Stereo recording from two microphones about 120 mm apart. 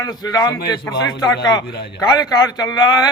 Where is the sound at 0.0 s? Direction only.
35° left (ahead or behind).